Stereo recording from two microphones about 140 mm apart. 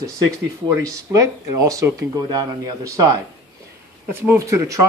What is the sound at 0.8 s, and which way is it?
Speech, 25° right (ahead or behind).